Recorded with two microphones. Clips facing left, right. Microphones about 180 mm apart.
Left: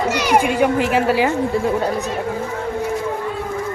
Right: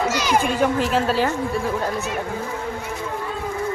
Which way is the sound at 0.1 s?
65° left (ahead or behind).